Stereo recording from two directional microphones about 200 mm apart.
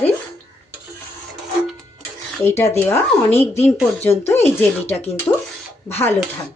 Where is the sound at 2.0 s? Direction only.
10° left (ahead or behind).